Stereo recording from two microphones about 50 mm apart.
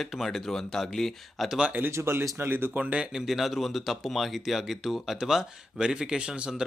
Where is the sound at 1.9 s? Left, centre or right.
Right.